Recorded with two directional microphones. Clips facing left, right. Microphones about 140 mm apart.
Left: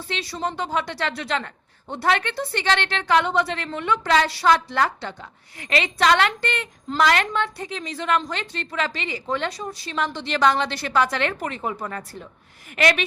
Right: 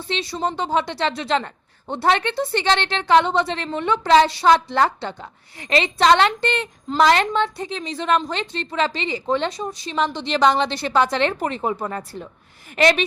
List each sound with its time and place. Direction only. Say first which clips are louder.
0.1 s a woman's voice: right 4 dB; 25° right (ahead or behind)